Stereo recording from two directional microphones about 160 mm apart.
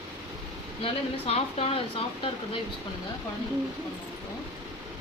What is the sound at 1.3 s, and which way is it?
Speech, 40° left (ahead or behind).